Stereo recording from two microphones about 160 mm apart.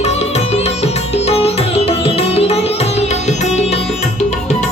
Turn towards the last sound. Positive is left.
turn(degrees=40)  # may be behind; listen again after turning